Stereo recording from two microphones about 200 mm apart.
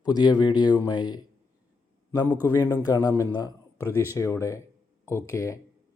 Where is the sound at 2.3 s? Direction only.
10° right (ahead or behind).